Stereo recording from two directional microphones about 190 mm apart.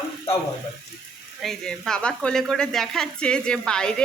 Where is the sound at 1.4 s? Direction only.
Centre (ahead or behind).